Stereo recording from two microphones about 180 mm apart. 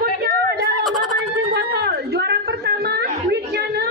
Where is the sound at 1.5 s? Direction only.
65° right (ahead or behind).